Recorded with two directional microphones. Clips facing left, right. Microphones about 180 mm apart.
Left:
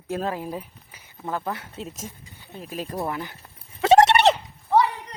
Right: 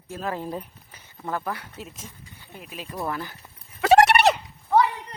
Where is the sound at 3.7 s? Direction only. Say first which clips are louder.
Left 1 dB; 25° left (ahead or behind).